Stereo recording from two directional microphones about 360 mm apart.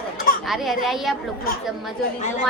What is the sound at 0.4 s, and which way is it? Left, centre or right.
Speech, centre.